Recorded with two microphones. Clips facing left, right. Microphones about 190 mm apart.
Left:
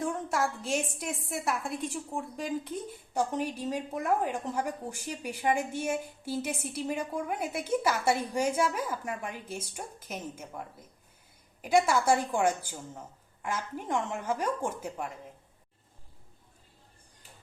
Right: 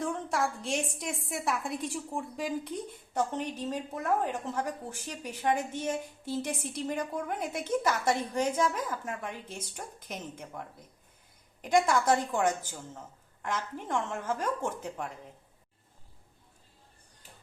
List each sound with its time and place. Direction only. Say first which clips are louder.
0.0 s a woman's voice: left 1 dB; centre (ahead or behind)